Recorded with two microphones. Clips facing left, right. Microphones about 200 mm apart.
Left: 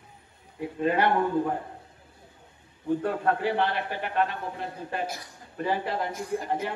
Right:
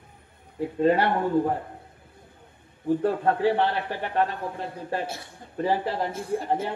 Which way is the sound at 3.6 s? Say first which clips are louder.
Right 2 dB; 35° right (ahead or behind).